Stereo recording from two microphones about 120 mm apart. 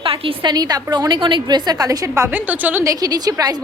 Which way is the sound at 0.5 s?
35° right (ahead or behind).